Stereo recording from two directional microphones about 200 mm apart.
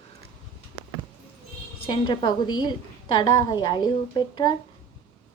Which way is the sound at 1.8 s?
25° left (ahead or behind).